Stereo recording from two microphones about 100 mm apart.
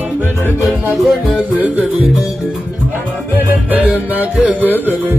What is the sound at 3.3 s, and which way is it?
Music, 15° right (ahead or behind).